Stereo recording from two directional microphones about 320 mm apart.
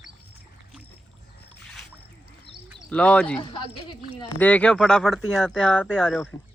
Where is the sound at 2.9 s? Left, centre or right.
Centre.